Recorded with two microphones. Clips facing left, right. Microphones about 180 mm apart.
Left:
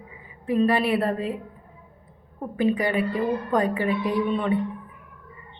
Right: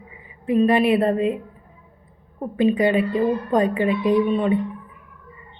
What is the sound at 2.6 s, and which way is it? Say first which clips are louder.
A woman's voice: right 5 dB; 20° right (ahead or behind).